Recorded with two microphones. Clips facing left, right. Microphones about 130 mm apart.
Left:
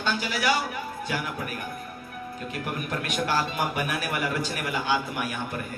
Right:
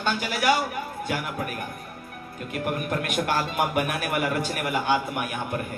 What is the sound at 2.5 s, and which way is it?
A man's voice, 50° right (ahead or behind).